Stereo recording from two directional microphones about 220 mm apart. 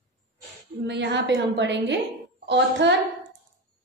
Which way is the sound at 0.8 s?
50° right (ahead or behind).